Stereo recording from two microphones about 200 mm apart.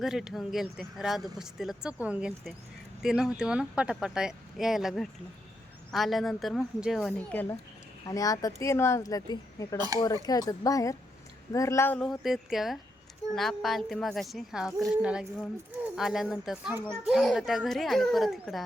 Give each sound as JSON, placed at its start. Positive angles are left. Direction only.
{"t": 0.0, "sound": "a woman's voice", "side_deg": 0}
{"t": 11.9, "sound": "speech", "side_deg": 0}